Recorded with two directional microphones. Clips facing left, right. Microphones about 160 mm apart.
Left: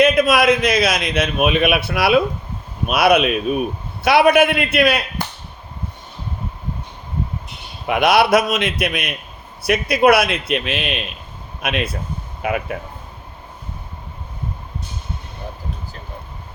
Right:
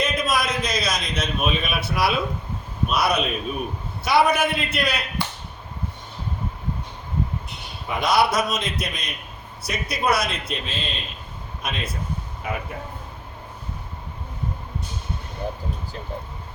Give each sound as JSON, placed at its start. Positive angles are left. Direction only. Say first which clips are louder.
{"t": 0.0, "sound": "a man's voice", "louder": "left 10 dB", "side_deg": 65}
{"t": 7.9, "sound": "a man's voice", "louder": "left 6 dB", "side_deg": 70}